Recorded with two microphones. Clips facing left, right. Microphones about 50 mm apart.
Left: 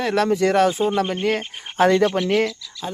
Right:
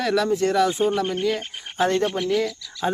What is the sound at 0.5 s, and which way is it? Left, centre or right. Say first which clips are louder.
Speech: left 2 dB; left.